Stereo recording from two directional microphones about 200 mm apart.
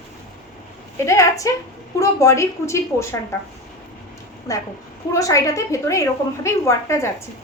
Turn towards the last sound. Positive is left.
turn(degrees=15)  # may be behind; listen again after turning